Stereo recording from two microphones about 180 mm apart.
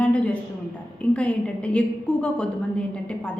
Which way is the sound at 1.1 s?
5° left (ahead or behind).